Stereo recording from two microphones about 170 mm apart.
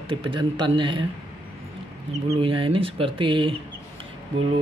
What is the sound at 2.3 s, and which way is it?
Speech, 30° right (ahead or behind).